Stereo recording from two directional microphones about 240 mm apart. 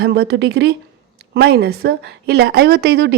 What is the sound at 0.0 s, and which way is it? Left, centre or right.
A woman's voice, right.